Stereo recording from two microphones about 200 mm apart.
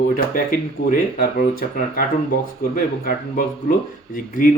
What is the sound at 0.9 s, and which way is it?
Speech, 45° left (ahead or behind).